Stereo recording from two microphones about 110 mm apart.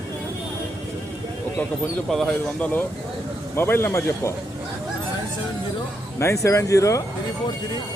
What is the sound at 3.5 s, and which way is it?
Speech, 20° left (ahead or behind).